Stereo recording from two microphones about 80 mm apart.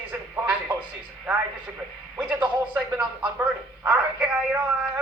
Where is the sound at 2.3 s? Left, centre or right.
Right.